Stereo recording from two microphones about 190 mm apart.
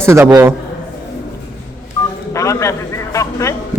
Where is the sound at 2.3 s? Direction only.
15° left (ahead or behind).